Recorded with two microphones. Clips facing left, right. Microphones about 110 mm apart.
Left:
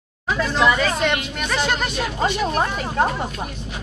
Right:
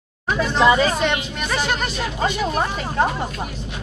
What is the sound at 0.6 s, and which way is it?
Speech, 25° right (ahead or behind).